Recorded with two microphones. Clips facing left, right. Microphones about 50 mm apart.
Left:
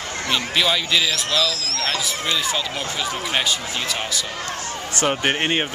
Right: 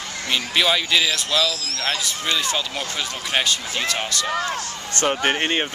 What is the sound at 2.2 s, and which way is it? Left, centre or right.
Speech, centre.